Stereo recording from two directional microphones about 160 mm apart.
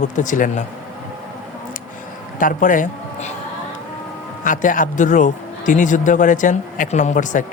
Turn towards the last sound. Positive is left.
turn(degrees=50)  # may be behind; listen again after turning